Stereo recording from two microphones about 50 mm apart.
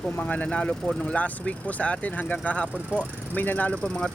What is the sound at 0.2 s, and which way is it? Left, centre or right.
Speech, left.